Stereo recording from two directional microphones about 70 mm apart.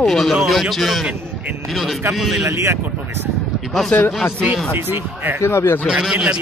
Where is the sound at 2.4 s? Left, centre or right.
Right.